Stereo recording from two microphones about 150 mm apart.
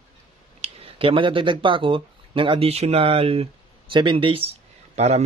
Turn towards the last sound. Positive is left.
turn(degrees=-45)  # may be behind; listen again after turning